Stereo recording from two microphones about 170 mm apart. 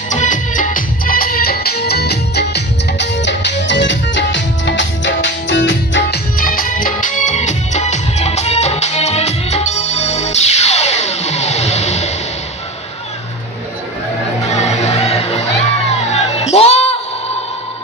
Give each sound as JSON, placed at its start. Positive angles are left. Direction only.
{"t": 0.1, "sound": "music", "side_deg": 50}
{"t": 14.5, "sound": "music", "side_deg": 40}